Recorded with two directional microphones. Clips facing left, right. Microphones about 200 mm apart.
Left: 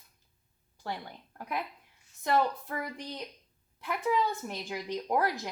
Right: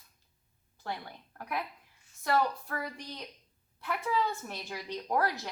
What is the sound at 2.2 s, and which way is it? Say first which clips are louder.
A woman's voice: left 1 dB; 20° left (ahead or behind).